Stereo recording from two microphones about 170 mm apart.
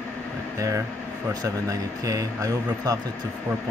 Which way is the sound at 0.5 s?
20° right (ahead or behind).